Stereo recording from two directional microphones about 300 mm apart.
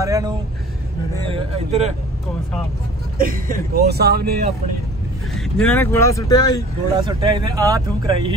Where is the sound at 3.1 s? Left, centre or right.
Right.